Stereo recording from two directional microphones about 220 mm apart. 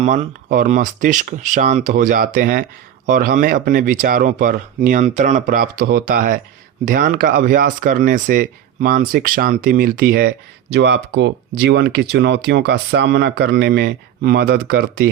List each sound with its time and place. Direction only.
0.0 s speech: 30° right (ahead or behind); by 15.1 s 45° right (ahead or behind)